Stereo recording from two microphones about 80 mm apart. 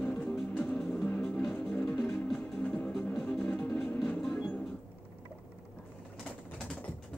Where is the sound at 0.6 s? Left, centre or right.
Centre.